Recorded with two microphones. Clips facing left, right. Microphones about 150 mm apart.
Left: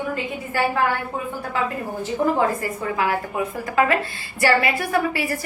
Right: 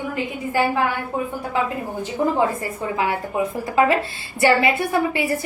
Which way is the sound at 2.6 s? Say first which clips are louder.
Even; 25° right (ahead or behind).